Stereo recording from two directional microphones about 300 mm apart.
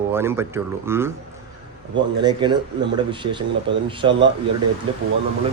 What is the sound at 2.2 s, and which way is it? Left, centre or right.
Speech, centre.